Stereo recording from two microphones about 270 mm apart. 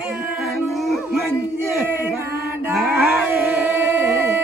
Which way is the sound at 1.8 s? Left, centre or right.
Centre.